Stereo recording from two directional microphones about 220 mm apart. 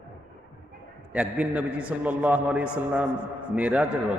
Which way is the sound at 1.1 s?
5° right (ahead or behind).